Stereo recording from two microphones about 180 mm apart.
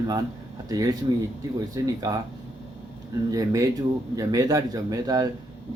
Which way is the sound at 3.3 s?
20° right (ahead or behind).